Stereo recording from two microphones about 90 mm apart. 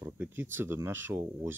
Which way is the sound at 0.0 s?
25° right (ahead or behind).